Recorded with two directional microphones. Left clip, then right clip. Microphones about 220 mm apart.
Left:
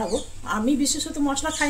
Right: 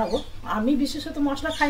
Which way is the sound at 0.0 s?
15° left (ahead or behind).